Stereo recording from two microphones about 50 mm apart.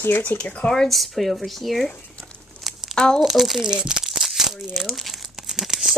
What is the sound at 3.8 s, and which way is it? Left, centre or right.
Tearing, centre.